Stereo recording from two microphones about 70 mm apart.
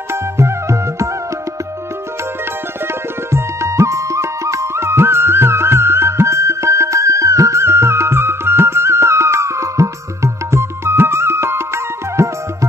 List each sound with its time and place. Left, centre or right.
0.1 s music: right
3.3 s music: right